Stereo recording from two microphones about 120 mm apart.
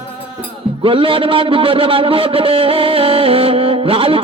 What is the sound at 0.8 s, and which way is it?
A man's voice, 50° right (ahead or behind).